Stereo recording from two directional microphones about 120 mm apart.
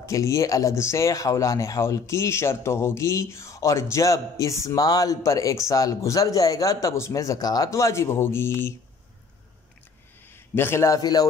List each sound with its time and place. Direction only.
0.0 s speech: 25° left (ahead or behind)
10.3 s a man's voice: 20° left (ahead or behind)
11.0 s speech: 35° left (ahead or behind)